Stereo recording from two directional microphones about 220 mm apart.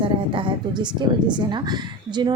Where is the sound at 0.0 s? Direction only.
25° right (ahead or behind).